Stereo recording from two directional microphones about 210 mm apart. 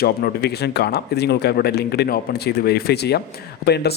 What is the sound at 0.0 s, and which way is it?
Speech, 50° left (ahead or behind).